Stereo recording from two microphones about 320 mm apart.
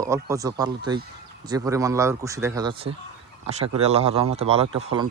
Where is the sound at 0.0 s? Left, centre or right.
Centre.